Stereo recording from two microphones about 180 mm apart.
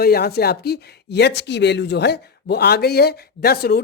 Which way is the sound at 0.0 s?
60° left (ahead or behind).